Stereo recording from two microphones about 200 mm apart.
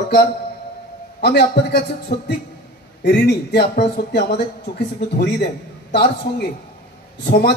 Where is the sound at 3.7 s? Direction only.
55° left (ahead or behind).